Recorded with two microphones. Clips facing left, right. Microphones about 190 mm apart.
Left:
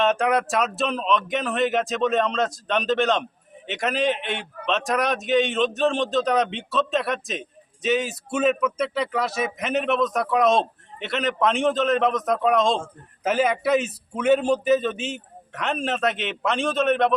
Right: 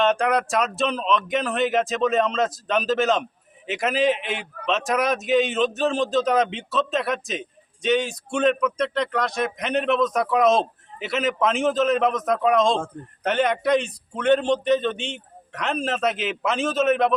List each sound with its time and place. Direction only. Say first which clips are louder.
0.0 s a man's voice: even; centre (ahead or behind)